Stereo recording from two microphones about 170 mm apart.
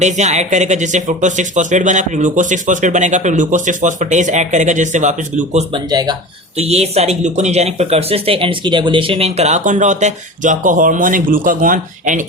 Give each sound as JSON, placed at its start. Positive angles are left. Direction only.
{"t": 0.0, "sound": "a man's voice", "side_deg": -45}
{"t": 5.7, "sound": "speech", "side_deg": -25}
{"t": 6.6, "sound": "speech", "side_deg": -40}